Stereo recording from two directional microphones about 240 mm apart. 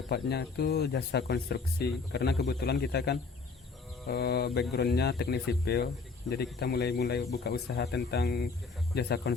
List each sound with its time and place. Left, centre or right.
0.1 s speech: left